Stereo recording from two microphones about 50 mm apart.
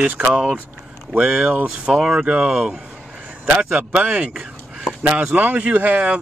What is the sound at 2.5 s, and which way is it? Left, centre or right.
Speech, centre.